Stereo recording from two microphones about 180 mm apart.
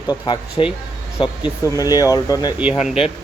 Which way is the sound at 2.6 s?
5° right (ahead or behind).